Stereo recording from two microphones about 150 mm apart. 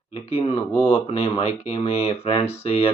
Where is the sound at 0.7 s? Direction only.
15° left (ahead or behind).